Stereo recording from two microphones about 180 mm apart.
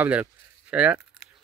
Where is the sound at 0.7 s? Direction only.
5° right (ahead or behind).